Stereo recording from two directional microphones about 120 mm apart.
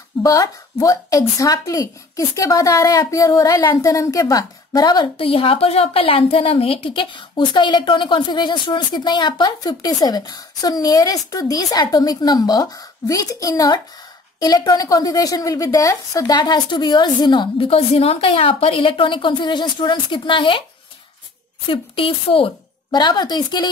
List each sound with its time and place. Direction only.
0.2 s a woman's voice: 30° left (ahead or behind)
5.2 s a woman's voice: 50° left (ahead or behind)
17.6 s a woman's voice: 55° left (ahead or behind)
21.6 s a woman's voice: 50° left (ahead or behind)
22.8 s a woman's voice: 35° left (ahead or behind)